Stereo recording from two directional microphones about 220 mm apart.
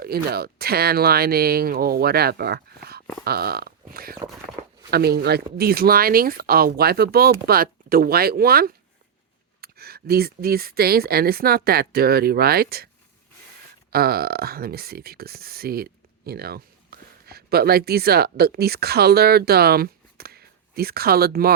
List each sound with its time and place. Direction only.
0.0 s speech: 45° right (ahead or behind)
3.2 s a sound: 45° right (ahead or behind)
4.9 s speech: 45° right (ahead or behind)
13.9 s speech: 45° right (ahead or behind)